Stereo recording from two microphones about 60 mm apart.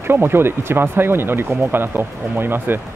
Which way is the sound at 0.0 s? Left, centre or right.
Right.